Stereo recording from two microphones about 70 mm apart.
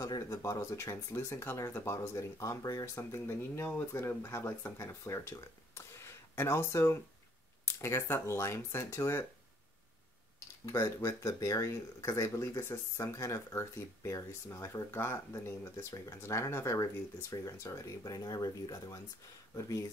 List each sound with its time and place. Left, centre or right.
0.0 s speech: left
0.4 s speech: left
3.0 s speech: left
10.6 s speech: left
16.2 s speech: left